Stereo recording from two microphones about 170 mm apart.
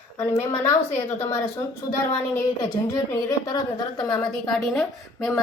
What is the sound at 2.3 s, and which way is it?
A woman's voice, 15° left (ahead or behind).